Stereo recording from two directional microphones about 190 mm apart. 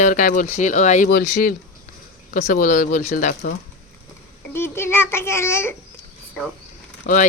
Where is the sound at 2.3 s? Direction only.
40° left (ahead or behind).